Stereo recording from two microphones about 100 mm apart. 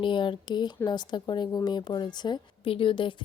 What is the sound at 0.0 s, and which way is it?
A woman's voice, 55° left (ahead or behind).